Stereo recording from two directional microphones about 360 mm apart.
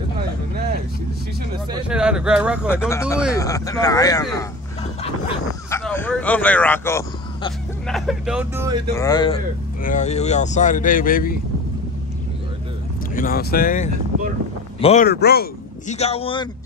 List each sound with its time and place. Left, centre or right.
1.7 s speech: centre
5.7 s speech: centre
8.9 s speech: centre
13.1 s speech: left